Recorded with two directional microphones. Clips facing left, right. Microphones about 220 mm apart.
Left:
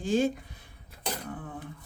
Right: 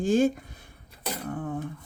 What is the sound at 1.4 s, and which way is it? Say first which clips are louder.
Speech: right 9 dB; 45° right (ahead or behind).